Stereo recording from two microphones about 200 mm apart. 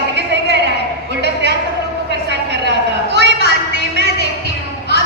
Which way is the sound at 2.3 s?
60° right (ahead or behind).